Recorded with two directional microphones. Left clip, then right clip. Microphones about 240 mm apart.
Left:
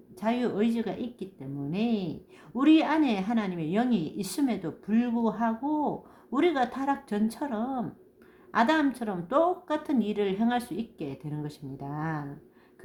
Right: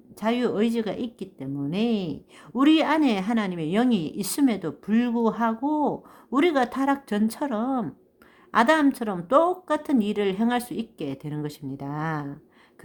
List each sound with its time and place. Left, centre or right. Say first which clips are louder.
0.2 s a woman's voice: right 4 dB; right